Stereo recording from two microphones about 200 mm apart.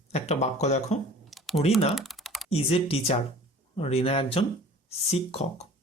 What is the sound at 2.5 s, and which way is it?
Speech, 30° left (ahead or behind).